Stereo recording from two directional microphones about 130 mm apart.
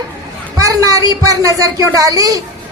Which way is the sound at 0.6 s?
25° right (ahead or behind).